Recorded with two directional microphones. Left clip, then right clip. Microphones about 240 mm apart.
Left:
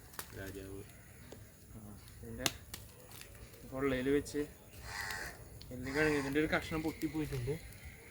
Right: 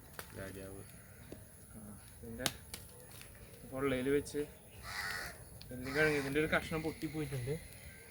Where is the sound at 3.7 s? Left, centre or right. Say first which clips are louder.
Left 1 dB; centre.